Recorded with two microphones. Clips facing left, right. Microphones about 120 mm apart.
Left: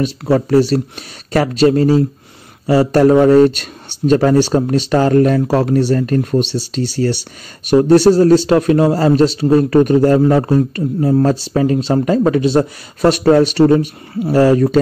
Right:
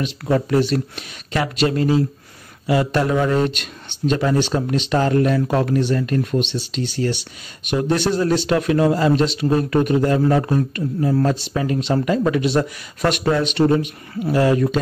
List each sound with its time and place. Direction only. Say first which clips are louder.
0.3 s speech: left 5 dB; 35° left (ahead or behind)
3.0 s speech: left 14 dB; 45° left (ahead or behind)